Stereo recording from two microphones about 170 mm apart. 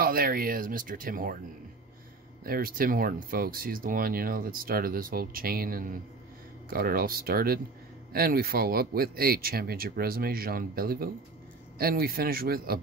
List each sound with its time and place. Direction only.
0.0 s speech: 60° right (ahead or behind)
2.4 s speech: 60° right (ahead or behind)